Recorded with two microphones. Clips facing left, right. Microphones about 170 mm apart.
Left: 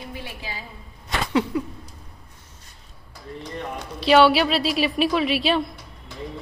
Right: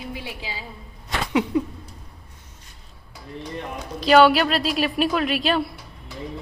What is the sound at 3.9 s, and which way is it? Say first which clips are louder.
A woman's voice: right 1 dB; centre (ahead or behind).